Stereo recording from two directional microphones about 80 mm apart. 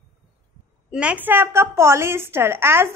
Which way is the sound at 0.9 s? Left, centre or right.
Centre.